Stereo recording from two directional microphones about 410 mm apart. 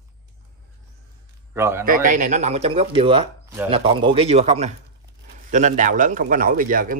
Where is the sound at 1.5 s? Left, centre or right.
Centre.